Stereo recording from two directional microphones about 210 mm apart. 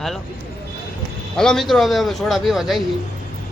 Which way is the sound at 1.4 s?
Centre (ahead or behind).